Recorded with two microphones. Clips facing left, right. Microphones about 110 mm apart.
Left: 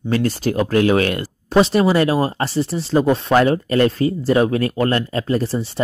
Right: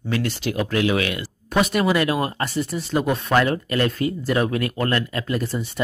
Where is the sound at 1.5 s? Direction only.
30° left (ahead or behind).